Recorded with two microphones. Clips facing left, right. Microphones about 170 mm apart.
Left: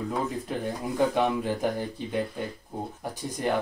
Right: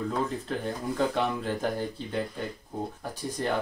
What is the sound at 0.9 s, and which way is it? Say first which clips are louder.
Speech: left 4 dB; 15° left (ahead or behind).